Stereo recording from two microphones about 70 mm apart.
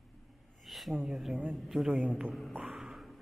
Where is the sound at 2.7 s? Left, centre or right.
Centre.